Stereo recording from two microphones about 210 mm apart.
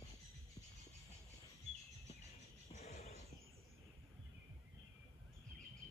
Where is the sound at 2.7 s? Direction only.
30° left (ahead or behind).